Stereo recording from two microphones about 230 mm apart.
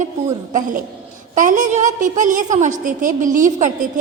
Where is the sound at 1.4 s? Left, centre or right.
Right.